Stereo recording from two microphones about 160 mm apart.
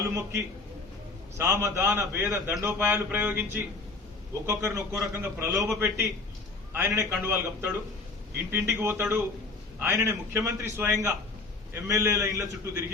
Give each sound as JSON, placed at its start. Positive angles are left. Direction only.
{"t": 0.1, "sound": "a man's voice", "side_deg": -20}